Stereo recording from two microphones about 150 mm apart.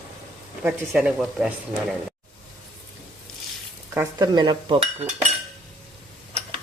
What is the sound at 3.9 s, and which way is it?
Dishes, 20° right (ahead or behind).